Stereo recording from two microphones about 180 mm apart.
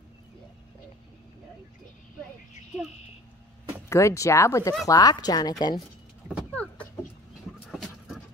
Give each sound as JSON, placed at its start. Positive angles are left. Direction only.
{"t": 3.9, "sound": "speech", "side_deg": 15}
{"t": 6.2, "sound": "vehicle", "side_deg": 5}